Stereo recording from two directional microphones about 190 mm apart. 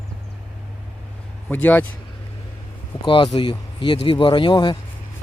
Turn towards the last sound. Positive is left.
turn(degrees=25)  # may be behind; listen again after turning